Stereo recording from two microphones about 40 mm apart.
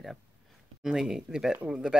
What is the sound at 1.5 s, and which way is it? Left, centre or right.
Speech, right.